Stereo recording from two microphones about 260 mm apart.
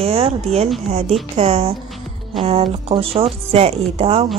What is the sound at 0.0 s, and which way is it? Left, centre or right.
Speech, right.